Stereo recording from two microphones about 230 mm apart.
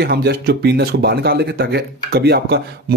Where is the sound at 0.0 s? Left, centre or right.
Right.